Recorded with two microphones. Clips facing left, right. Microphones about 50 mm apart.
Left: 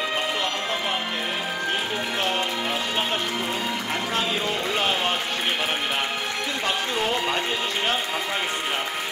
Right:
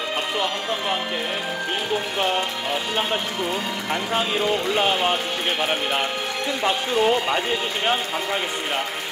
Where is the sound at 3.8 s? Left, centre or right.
Centre.